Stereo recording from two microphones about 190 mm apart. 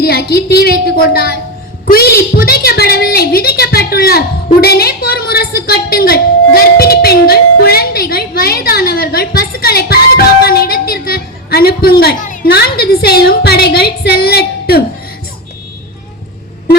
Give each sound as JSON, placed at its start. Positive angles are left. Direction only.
{"t": 0.0, "sound": "a woman's voice", "side_deg": 55}